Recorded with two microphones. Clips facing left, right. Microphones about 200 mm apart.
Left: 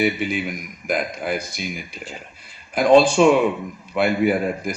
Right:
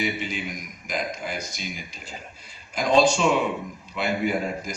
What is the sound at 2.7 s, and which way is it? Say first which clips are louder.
A man's voice: left 6 dB; 55° left (ahead or behind).